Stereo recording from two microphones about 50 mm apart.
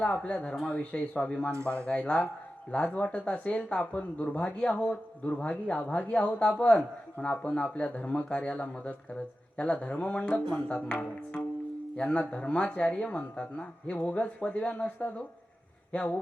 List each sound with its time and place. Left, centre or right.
0.0 s a man's voice: left